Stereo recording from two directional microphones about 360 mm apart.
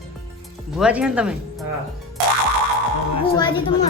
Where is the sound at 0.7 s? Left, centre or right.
Centre.